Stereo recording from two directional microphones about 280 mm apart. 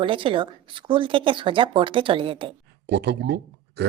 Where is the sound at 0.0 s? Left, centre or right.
Centre.